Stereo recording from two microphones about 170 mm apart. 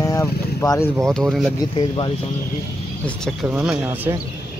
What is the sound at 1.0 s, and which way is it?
Speech, centre (ahead or behind).